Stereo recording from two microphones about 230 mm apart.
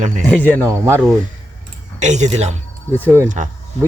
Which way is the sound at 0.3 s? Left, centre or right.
Centre.